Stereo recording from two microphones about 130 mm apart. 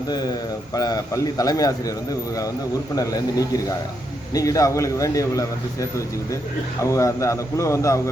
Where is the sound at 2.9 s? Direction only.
25° left (ahead or behind).